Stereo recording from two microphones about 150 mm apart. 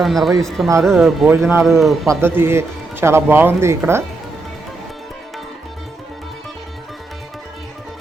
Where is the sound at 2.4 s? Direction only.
15° right (ahead or behind).